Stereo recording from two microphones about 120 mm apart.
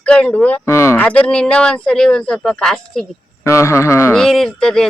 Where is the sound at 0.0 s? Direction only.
10° left (ahead or behind).